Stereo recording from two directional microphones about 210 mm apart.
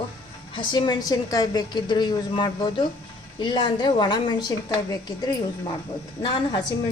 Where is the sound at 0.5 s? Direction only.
20° left (ahead or behind).